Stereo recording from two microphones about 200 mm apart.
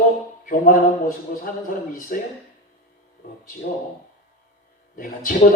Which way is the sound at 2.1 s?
45° left (ahead or behind).